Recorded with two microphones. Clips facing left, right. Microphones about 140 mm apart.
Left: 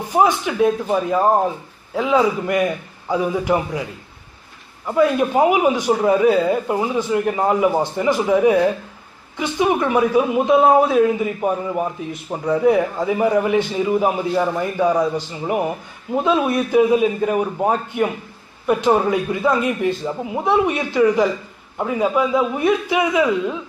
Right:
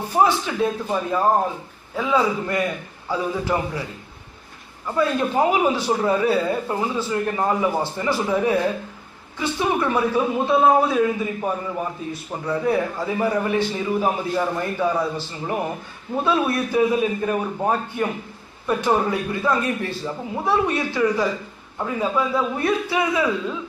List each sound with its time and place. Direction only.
0.1 s a man's voice: 15° left (ahead or behind)
4.8 s a man's voice: 15° left (ahead or behind)